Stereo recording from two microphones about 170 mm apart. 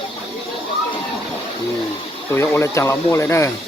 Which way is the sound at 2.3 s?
15° left (ahead or behind).